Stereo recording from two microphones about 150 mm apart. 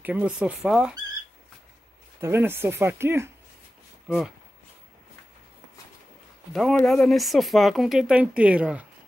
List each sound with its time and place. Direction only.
0.0 s speech: 10° right (ahead or behind)
2.1 s speech: 15° right (ahead or behind)
6.5 s speech: centre (ahead or behind)